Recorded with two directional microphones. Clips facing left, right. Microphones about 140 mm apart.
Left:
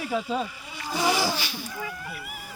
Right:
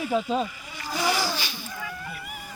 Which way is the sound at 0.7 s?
25° left (ahead or behind).